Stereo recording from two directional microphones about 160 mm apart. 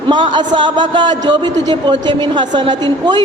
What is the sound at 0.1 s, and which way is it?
A woman's voice, 30° right (ahead or behind).